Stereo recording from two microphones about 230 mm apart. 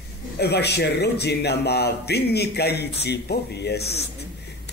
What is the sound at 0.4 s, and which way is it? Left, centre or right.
Speech, left.